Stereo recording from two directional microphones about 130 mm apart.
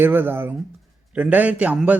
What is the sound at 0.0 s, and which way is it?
A man's voice, 15° right (ahead or behind).